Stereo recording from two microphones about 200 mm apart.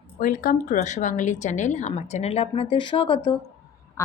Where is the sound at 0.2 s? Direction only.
40° left (ahead or behind); by 3.2 s 25° left (ahead or behind).